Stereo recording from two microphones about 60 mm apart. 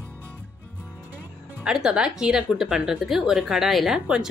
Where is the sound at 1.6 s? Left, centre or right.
Centre.